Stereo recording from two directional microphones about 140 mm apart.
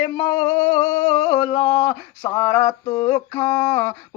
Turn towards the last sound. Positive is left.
turn(degrees=30)  # may be behind; listen again after turning